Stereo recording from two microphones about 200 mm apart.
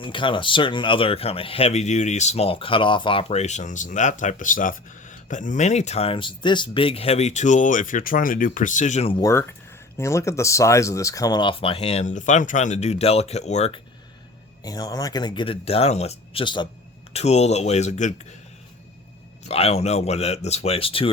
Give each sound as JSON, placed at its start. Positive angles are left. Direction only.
{"t": 0.0, "sound": "a man's voice", "side_deg": 25}
{"t": 9.2, "sound": "speech", "side_deg": 10}
{"t": 14.6, "sound": "a man's voice", "side_deg": 20}
{"t": 19.5, "sound": "a man's voice", "side_deg": 30}